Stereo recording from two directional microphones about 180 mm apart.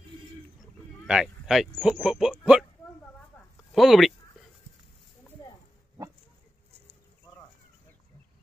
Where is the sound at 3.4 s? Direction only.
10° left (ahead or behind).